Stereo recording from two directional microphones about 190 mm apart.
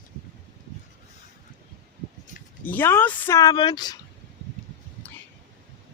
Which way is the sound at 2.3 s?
40° left (ahead or behind).